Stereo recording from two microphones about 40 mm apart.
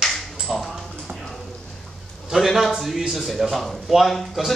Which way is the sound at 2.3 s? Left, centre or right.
Centre.